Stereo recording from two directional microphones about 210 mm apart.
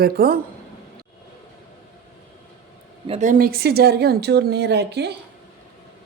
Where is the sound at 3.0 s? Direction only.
30° right (ahead or behind); by 5.2 s 50° right (ahead or behind).